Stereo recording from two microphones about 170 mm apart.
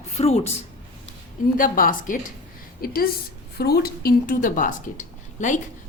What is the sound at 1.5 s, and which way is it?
Speech, 55° left (ahead or behind).